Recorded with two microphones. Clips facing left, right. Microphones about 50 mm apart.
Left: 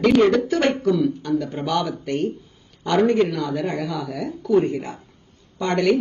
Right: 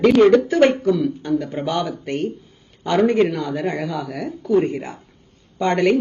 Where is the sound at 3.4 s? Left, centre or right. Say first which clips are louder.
Right 1 dB; right.